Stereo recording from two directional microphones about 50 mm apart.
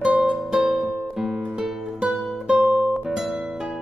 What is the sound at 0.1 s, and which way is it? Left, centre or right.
Music, centre.